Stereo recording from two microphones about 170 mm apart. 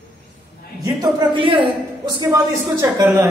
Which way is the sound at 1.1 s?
30° right (ahead or behind).